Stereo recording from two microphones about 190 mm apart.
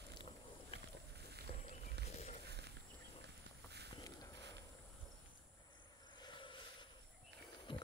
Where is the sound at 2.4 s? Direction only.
60° right (ahead or behind).